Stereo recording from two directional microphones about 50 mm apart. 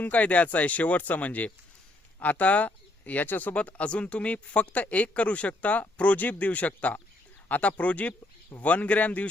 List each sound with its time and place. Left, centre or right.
0.0 s speech: left
3.5 s speech: left